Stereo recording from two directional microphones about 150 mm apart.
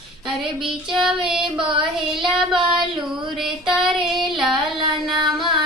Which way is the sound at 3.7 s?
5° right (ahead or behind).